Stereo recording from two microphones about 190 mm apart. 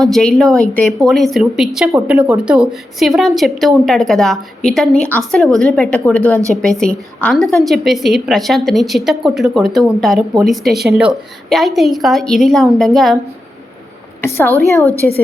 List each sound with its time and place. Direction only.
0.0 s a woman's voice: centre (ahead or behind)
14.2 s a woman's voice: 10° left (ahead or behind)
14.5 s a woman's voice: 15° right (ahead or behind)